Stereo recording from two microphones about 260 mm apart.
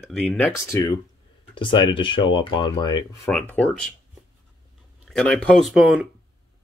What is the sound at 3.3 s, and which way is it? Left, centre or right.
Speech, centre.